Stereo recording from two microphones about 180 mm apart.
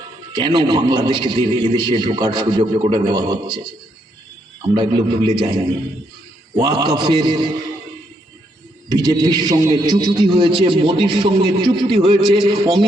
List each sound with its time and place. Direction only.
0.3 s a man's voice: 30° right (ahead or behind)
4.7 s a man's voice: 30° right (ahead or behind)
6.6 s a man's voice: 25° right (ahead or behind)
8.9 s a man's voice: 20° right (ahead or behind)